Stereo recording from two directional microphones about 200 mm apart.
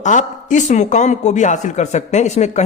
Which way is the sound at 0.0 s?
40° left (ahead or behind).